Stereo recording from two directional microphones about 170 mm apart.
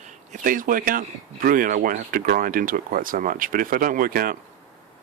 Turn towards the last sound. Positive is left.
turn(degrees=-55)  # may be behind; listen again after turning